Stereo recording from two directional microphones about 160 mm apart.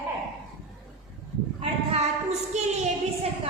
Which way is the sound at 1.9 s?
45° right (ahead or behind).